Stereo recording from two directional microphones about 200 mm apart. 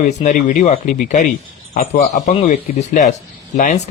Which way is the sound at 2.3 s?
30° left (ahead or behind).